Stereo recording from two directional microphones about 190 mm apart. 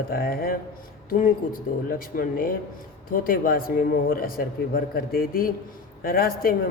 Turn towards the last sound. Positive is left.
turn(degrees=50)  # may be behind; listen again after turning